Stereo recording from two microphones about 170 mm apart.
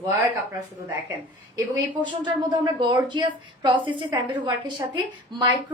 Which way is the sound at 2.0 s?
25° right (ahead or behind).